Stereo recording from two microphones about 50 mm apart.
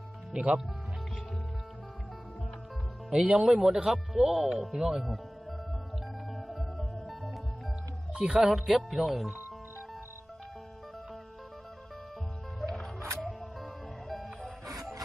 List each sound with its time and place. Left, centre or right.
0.3 s speech: right
3.1 s speech: centre
5.0 s music: centre
8.1 s speech: centre
12.5 s music: centre